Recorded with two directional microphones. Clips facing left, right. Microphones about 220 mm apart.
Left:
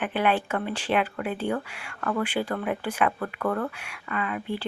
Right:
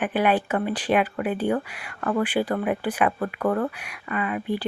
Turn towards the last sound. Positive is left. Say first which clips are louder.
# right 3 dB
turn(degrees=-15)  # may be behind; listen again after turning